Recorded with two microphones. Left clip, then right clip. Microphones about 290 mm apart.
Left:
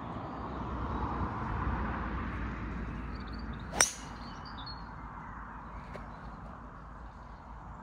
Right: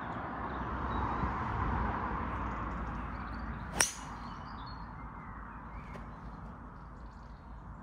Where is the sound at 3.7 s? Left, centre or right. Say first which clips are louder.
Left 3 dB; centre.